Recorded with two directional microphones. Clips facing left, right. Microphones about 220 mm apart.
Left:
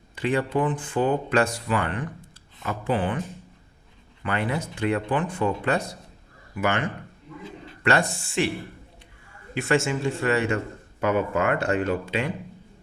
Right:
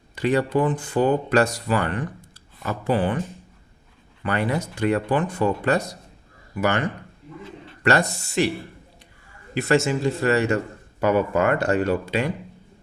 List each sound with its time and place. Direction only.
0.2 s speech: 40° right (ahead or behind)
4.2 s speech: 40° right (ahead or behind)
7.9 s speech: 40° right (ahead or behind)
9.6 s speech: 40° right (ahead or behind)